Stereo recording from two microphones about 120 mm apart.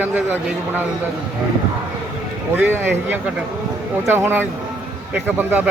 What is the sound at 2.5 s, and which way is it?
Speech, 15° right (ahead or behind).